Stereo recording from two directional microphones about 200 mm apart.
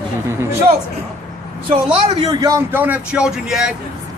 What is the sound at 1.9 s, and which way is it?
A man's voice, 25° right (ahead or behind).